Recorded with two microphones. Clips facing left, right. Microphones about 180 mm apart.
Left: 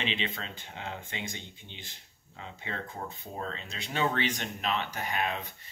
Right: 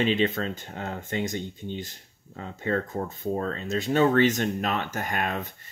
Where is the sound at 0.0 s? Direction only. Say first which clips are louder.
Right 11 dB; 45° right (ahead or behind).